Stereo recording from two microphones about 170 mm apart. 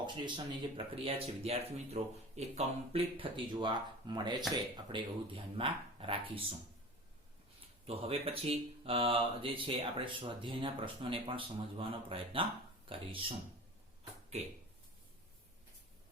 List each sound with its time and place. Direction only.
0.0 s speech: 25° right (ahead or behind)
7.9 s speech: 35° right (ahead or behind)